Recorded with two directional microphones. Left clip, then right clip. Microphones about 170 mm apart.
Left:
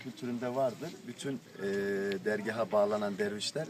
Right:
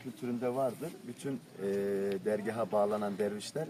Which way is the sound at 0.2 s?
Centre (ahead or behind).